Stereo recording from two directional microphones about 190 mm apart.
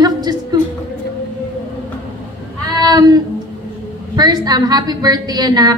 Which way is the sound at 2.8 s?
20° right (ahead or behind).